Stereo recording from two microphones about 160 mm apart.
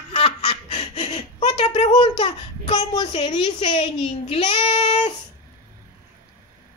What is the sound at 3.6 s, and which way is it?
Speech, 45° left (ahead or behind).